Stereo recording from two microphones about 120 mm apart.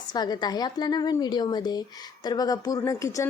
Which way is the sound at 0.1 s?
35° left (ahead or behind).